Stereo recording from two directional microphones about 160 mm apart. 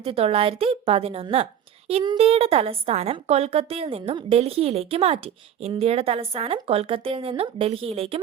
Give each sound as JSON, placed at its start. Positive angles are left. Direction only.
{"t": 0.0, "sound": "a woman's voice", "side_deg": -35}